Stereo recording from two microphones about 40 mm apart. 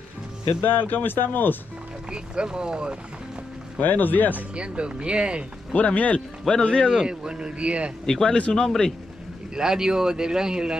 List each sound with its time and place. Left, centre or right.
0.6 s speech: left
2.0 s speech: right
3.8 s speech: left
4.6 s speech: right
5.8 s speech: left
6.6 s speech: left
6.9 s speech: centre
8.1 s speech: centre
9.6 s speech: centre